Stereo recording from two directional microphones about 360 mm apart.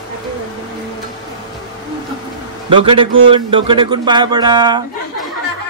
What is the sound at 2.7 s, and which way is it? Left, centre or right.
Speech, centre.